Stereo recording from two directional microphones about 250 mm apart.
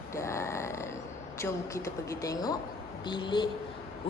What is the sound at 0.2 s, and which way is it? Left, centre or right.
Grunt, centre.